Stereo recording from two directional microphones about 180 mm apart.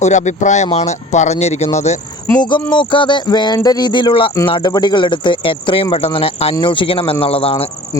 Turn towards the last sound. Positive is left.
turn(degrees=30)  # may be behind; listen again after turning